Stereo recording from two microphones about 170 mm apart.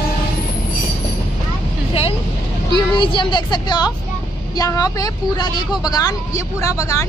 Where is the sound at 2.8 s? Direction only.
30° left (ahead or behind).